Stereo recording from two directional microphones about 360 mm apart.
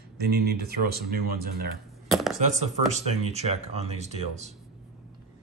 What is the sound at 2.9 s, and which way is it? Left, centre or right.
Speech, centre.